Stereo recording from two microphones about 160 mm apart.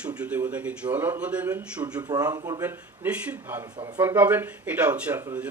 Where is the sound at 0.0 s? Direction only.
5° right (ahead or behind).